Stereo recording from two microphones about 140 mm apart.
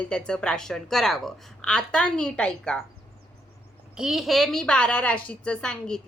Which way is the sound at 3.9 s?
5° right (ahead or behind).